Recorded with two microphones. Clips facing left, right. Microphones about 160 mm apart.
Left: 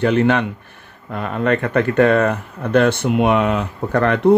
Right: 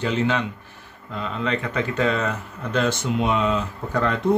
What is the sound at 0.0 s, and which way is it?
Speech, 60° left (ahead or behind).